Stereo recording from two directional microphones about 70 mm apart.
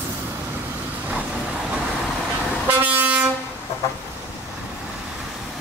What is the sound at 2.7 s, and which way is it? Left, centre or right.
Vehicle, right.